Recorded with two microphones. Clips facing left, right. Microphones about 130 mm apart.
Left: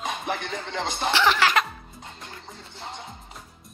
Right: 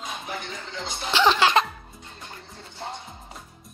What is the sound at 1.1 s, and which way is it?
Speech, 20° right (ahead or behind).